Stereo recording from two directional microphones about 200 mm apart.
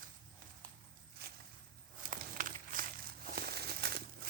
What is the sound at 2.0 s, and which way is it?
Crumpling, 45° right (ahead or behind).